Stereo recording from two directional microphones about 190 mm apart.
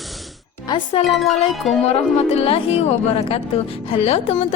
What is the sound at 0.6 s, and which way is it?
Music, 25° left (ahead or behind).